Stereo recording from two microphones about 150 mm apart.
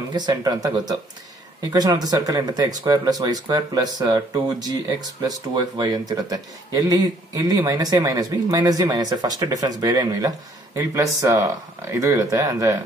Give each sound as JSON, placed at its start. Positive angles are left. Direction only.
{"t": 0.1, "sound": "speech", "side_deg": -30}